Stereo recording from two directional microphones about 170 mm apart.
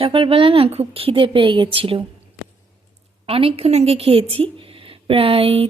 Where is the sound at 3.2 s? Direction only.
35° right (ahead or behind).